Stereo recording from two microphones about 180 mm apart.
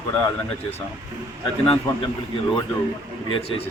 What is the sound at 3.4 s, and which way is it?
Speech, 30° left (ahead or behind).